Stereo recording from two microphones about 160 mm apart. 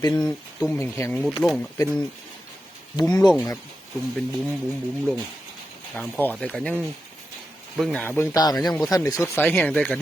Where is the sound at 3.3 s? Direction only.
15° left (ahead or behind).